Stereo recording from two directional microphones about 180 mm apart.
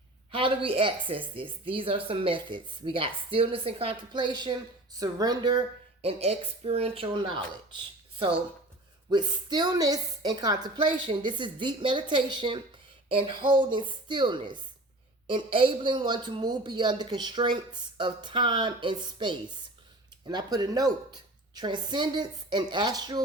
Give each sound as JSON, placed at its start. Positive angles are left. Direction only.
{"t": 0.3, "sound": "a woman's voice", "side_deg": -30}
{"t": 9.0, "sound": "speech", "side_deg": -25}
{"t": 20.2, "sound": "speech", "side_deg": -20}